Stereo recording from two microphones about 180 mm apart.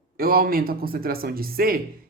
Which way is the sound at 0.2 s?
55° right (ahead or behind).